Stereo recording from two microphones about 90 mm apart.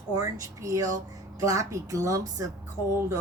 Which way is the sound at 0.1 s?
40° right (ahead or behind).